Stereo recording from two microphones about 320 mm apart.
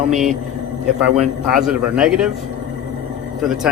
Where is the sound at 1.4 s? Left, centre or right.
Centre.